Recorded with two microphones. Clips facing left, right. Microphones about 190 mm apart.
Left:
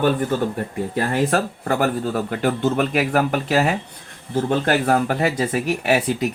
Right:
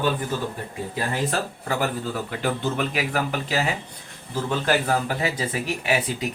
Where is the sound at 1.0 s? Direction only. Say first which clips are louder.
Left 6 dB; 55° left (ahead or behind).